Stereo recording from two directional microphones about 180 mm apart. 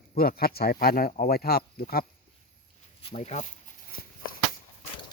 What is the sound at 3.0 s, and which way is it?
Speech, 35° left (ahead or behind).